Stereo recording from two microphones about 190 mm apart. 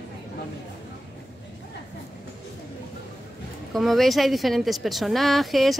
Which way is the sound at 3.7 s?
Centre (ahead or behind).